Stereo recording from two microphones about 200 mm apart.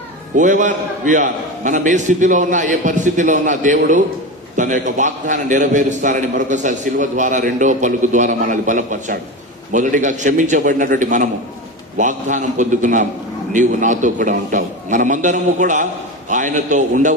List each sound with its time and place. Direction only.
0.4 s a man's voice: 40° right (ahead or behind)